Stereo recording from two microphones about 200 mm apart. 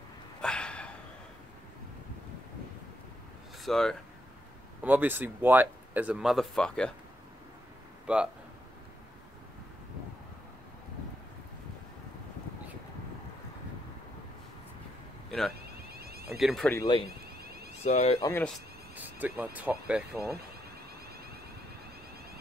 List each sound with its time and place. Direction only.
0.4 s a sound: 5° left (ahead or behind)
3.6 s speech: centre (ahead or behind)
4.8 s speech: 10° right (ahead or behind)
8.1 s speech: 5° right (ahead or behind)
15.9 s a sound: 50° right (ahead or behind)
16.3 s speech: centre (ahead or behind)
16.7 s speech: 20° left (ahead or behind)
17.8 s speech: 30° left (ahead or behind)
18.2 s speech: 10° left (ahead or behind)
18.9 s speech: 10° right (ahead or behind)